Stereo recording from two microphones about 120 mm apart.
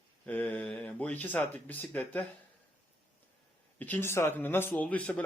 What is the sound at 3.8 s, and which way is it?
A man's voice, 15° left (ahead or behind).